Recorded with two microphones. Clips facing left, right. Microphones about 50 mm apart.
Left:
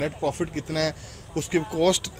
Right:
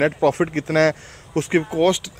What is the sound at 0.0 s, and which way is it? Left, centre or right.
Speech, right.